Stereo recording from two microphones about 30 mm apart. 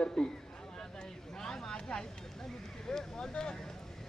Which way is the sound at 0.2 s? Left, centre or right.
Centre.